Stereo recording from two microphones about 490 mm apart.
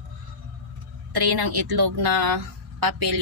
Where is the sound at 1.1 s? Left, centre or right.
Right.